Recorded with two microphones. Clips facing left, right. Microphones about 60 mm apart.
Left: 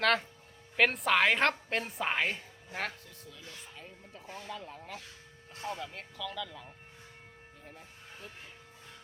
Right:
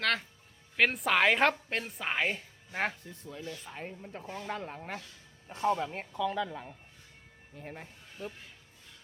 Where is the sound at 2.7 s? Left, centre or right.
Right.